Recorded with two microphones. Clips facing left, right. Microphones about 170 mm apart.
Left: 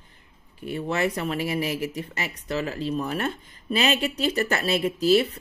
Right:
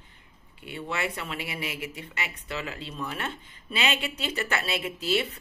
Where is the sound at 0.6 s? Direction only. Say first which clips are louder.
Left 7 dB; 40° left (ahead or behind).